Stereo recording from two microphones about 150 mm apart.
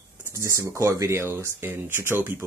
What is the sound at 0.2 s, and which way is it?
Speech, 20° right (ahead or behind).